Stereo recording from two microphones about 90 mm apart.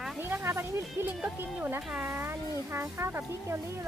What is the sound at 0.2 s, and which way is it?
Music, 25° right (ahead or behind).